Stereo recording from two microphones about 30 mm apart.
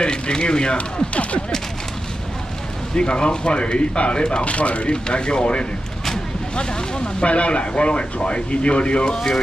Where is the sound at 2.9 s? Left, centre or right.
Left.